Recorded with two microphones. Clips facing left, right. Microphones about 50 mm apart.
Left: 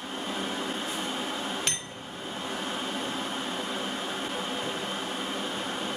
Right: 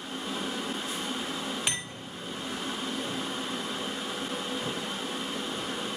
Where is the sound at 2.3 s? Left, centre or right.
Left.